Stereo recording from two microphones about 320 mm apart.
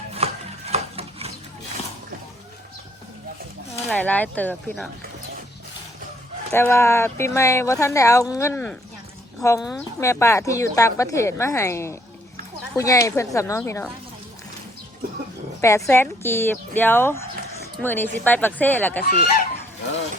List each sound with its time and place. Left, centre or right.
0.1 s a sound: centre
3.8 s speech: centre
6.5 s speech: centre
15.6 s speech: centre
19.0 s fowl: left